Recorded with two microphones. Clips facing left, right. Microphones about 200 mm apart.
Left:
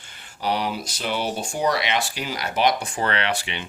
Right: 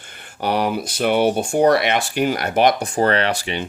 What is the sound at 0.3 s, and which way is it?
Speech, 55° right (ahead or behind).